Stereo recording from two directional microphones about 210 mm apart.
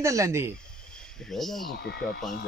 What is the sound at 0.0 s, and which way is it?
Speech, 15° right (ahead or behind).